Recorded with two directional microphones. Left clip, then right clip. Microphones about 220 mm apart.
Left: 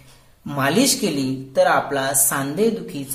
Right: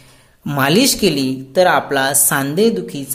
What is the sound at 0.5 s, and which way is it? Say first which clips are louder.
Speech: right 5 dB; 40° right (ahead or behind).